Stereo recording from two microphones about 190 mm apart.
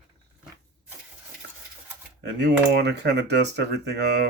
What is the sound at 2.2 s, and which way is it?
Speech, 65° right (ahead or behind).